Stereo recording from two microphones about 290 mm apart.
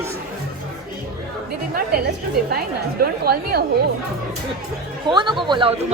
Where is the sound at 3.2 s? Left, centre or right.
Right.